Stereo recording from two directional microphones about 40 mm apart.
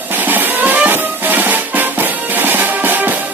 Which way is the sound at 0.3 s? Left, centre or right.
Right.